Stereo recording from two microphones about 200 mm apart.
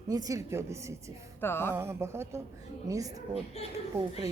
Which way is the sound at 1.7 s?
15° right (ahead or behind).